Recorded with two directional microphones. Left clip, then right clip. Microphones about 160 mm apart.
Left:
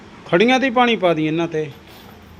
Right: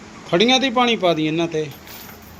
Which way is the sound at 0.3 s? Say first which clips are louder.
Left 1 dB; 25° left (ahead or behind).